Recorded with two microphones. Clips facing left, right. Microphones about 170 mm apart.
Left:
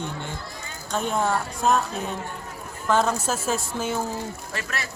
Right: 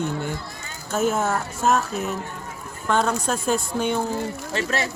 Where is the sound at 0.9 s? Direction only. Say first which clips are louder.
Right 2 dB; 5° right (ahead or behind).